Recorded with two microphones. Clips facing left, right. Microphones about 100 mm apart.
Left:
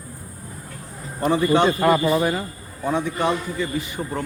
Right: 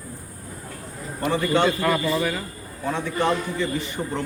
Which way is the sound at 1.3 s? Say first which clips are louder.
Left 3 dB; 15° left (ahead or behind).